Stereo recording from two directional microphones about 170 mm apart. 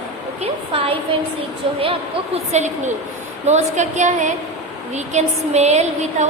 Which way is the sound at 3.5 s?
45° right (ahead or behind).